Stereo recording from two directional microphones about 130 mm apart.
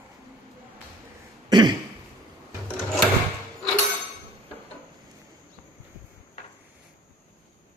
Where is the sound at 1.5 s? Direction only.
35° right (ahead or behind).